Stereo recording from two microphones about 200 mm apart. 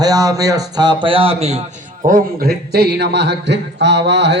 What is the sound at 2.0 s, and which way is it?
A man's voice, 50° right (ahead or behind).